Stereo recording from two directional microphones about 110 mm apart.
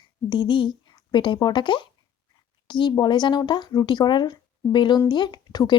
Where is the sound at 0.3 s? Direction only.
45° left (ahead or behind).